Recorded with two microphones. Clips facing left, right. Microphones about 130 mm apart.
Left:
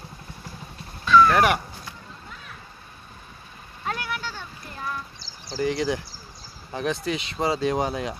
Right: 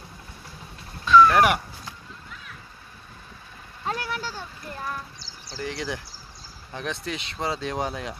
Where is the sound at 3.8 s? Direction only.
35° right (ahead or behind).